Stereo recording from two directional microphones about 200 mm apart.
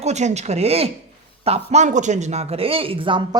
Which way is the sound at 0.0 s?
35° right (ahead or behind).